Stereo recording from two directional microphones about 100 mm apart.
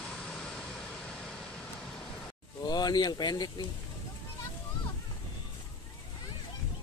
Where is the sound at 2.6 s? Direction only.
45° left (ahead or behind).